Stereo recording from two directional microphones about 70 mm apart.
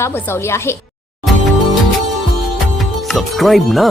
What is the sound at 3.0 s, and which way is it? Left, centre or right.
Speech, centre.